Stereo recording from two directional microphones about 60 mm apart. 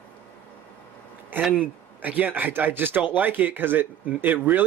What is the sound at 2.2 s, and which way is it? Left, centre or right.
Speech, right.